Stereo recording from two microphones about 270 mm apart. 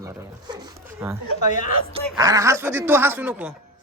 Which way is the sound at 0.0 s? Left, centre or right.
Centre.